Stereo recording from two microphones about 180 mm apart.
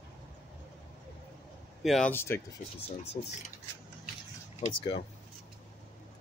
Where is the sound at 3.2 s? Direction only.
40° left (ahead or behind).